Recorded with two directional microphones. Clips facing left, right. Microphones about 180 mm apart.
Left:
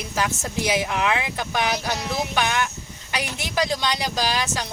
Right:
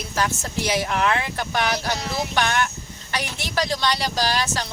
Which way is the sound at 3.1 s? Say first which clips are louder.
Even; 15° left (ahead or behind).